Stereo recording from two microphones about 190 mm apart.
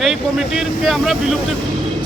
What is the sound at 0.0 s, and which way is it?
Speech, centre (ahead or behind).